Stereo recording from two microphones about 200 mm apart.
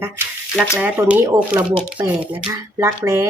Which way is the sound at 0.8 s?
5° right (ahead or behind).